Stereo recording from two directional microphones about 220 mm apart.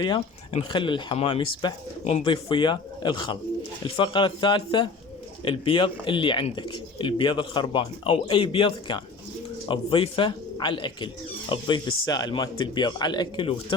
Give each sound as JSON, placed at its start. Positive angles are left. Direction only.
{"t": 0.0, "sound": "speech", "side_deg": 20}